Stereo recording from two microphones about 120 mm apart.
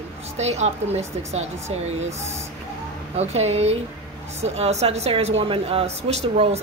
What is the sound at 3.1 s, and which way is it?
A woman's voice, 65° right (ahead or behind).